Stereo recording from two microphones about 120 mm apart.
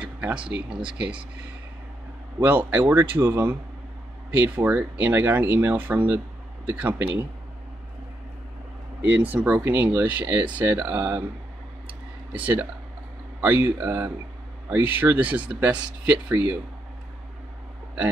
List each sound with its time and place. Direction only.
0.0 s a sound: 10° right (ahead or behind)
0.5 s speech: 10° right (ahead or behind)
2.4 s speech: 15° right (ahead or behind)
9.2 s speech: 15° right (ahead or behind)
12.3 s speech: 15° right (ahead or behind)